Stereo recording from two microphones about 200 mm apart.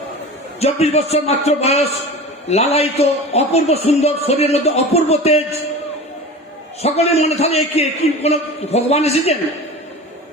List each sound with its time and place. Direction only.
0.6 s a man's voice: 30° left (ahead or behind)
6.8 s a man's voice: 30° left (ahead or behind)